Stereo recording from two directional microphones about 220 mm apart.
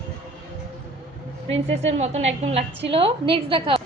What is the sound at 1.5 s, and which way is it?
A woman's voice, 30° right (ahead or behind).